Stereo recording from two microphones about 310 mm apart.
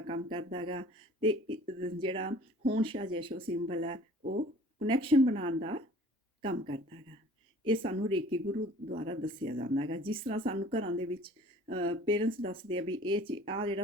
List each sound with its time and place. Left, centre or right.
0.0 s speech: centre